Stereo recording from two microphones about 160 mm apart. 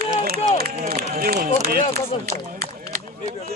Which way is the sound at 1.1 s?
70° right (ahead or behind).